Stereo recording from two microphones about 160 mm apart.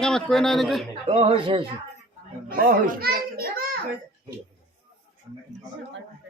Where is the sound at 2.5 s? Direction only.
65° right (ahead or behind).